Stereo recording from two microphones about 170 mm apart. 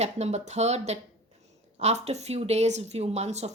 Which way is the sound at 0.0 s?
40° right (ahead or behind).